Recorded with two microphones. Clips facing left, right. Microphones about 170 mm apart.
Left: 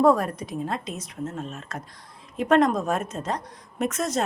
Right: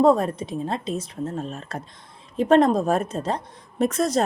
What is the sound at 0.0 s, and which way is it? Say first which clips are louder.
A woman's voice: right 2 dB; 25° right (ahead or behind).